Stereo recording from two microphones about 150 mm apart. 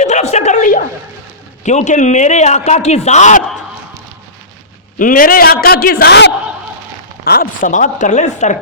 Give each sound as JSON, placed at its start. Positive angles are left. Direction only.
{"t": 0.0, "sound": "a sound", "side_deg": 50}
{"t": 1.6, "sound": "a man's voice", "side_deg": 50}
{"t": 4.9, "sound": "a man's voice", "side_deg": 65}
{"t": 7.3, "sound": "speech", "side_deg": 70}